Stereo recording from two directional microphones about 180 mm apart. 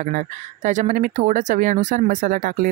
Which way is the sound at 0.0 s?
45° right (ahead or behind).